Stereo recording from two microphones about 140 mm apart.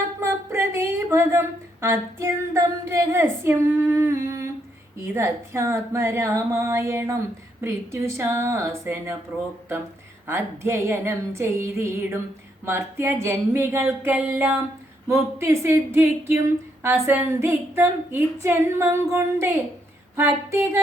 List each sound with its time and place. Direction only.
0.2 s a woman's voice: 15° right (ahead or behind)
10.2 s speech: 20° right (ahead or behind)